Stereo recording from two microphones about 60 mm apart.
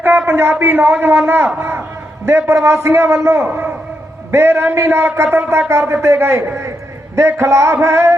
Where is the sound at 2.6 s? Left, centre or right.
Right.